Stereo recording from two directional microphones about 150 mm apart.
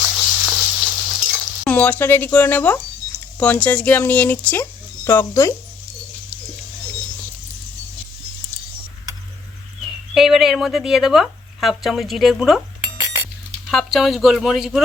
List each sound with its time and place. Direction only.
0.1 s a sound: 5° right (ahead or behind)
1.6 s speech: 10° left (ahead or behind)
10.2 s speech: 5° right (ahead or behind)
13.7 s speech: centre (ahead or behind)